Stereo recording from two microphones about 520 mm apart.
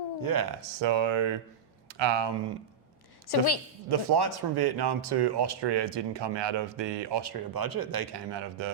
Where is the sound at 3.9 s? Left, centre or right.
Right.